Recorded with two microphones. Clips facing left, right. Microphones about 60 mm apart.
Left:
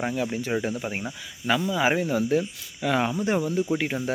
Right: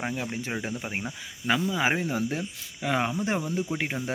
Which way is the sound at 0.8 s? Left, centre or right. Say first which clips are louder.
Left 2 dB; centre.